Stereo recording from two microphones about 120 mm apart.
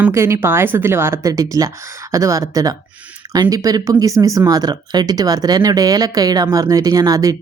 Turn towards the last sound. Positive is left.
turn(degrees=-30)  # may be behind; listen again after turning